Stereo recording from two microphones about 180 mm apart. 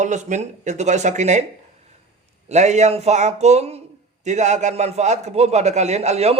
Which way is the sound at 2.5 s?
40° right (ahead or behind).